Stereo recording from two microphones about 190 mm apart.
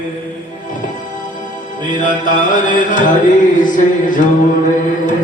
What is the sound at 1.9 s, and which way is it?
Mantra, 45° left (ahead or behind).